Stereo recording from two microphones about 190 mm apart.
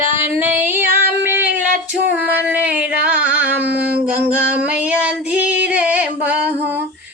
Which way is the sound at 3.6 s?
60° right (ahead or behind).